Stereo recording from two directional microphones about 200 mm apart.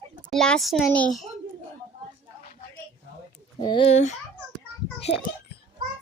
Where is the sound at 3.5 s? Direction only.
25° left (ahead or behind).